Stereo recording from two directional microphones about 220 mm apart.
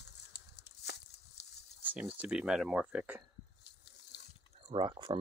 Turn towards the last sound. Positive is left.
turn(degrees=-20)  # may be behind; listen again after turning